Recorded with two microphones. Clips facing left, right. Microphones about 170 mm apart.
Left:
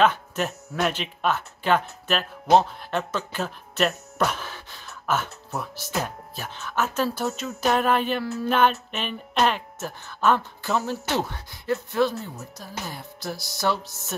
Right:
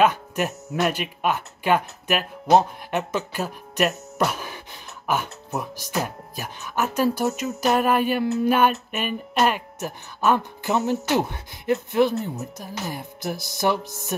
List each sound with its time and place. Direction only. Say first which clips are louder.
0.0 s speech: right 1 dB; 10° right (ahead or behind)